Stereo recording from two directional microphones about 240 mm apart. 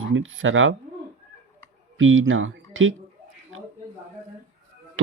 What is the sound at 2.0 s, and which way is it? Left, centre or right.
Speech, right.